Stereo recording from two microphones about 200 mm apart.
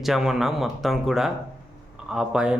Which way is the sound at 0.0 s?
Centre (ahead or behind).